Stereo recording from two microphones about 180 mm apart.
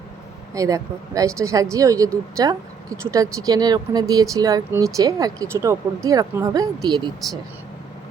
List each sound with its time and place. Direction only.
0.5 s speech: 20° right (ahead or behind)